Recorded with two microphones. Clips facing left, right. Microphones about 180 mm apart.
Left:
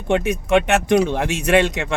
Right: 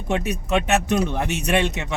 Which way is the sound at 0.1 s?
85° left.